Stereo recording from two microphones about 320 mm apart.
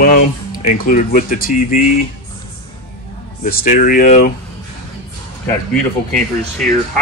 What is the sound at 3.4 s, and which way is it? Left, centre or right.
Speech, left.